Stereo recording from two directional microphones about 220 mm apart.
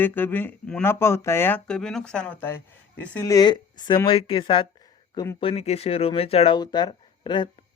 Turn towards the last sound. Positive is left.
turn(degrees=20)  # may be behind; listen again after turning